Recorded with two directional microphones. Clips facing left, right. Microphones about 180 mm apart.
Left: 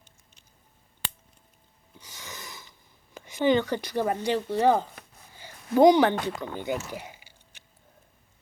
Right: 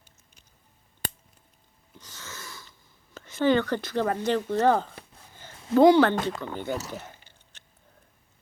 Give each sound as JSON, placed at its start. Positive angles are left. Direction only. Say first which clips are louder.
{"t": 2.0, "sound": "a sound", "louder": "even", "side_deg": 15}
{"t": 3.2, "sound": "speech", "louder": "even", "side_deg": 15}
{"t": 6.9, "sound": "biting", "louder": "even", "side_deg": 10}